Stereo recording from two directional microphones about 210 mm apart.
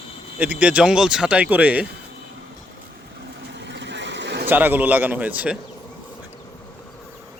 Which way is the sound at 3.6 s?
55° right (ahead or behind).